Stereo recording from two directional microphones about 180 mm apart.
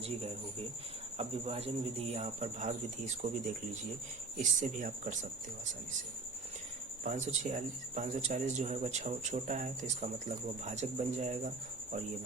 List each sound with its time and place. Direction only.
1.2 s speech: 35° right (ahead or behind)
7.0 s speech: 45° right (ahead or behind)